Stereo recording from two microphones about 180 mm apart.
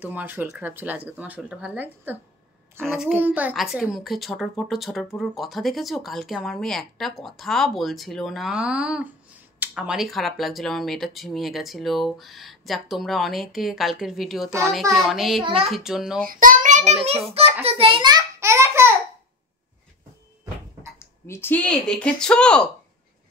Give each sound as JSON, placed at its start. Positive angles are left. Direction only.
{"t": 0.0, "sound": "a woman's voice", "side_deg": -10}
{"t": 3.2, "sound": "a woman's voice", "side_deg": -10}
{"t": 16.3, "sound": "a child's voice", "side_deg": -50}
{"t": 21.0, "sound": "a woman's voice", "side_deg": 15}